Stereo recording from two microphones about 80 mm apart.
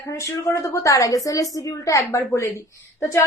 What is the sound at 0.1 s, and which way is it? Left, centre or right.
A woman's voice, left.